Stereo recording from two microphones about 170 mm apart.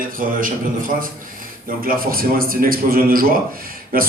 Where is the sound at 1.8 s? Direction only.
60° right (ahead or behind).